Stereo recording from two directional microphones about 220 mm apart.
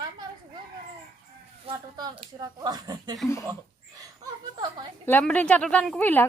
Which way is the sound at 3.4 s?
15° right (ahead or behind).